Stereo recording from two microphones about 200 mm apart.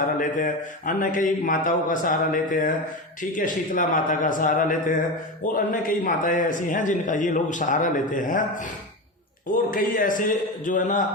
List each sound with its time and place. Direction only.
0.2 s a man's voice: 40° left (ahead or behind)